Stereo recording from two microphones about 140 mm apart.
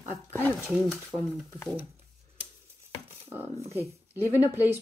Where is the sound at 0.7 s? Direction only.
Centre (ahead or behind).